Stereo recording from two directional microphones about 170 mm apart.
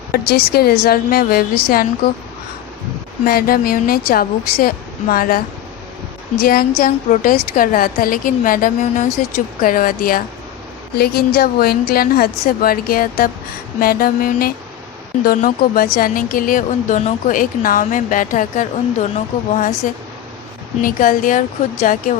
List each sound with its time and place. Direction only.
0.1 s a woman's voice: 65° left (ahead or behind)
3.2 s a woman's voice: 60° left (ahead or behind)
6.4 s a woman's voice: 60° left (ahead or behind)
20.8 s speech: 55° left (ahead or behind)